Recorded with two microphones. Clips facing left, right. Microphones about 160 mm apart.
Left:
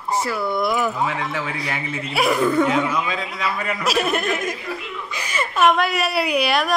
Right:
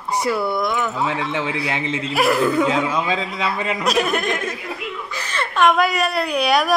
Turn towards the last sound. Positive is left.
turn(degrees=0)  # may be behind; listen again after turning